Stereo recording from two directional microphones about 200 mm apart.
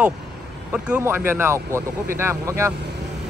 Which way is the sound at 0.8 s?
10° right (ahead or behind).